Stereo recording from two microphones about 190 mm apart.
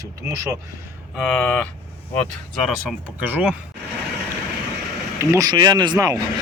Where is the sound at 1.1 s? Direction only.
Centre (ahead or behind).